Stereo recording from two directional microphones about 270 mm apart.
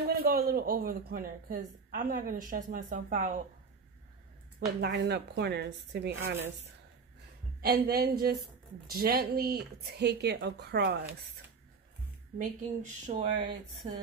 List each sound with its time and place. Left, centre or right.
0.1 s a man's voice: right
4.6 s a man's voice: right
7.6 s a man's voice: right
12.4 s speech: right